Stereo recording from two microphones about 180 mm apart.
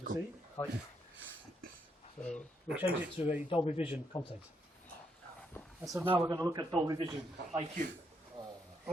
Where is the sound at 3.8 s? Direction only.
10° right (ahead or behind).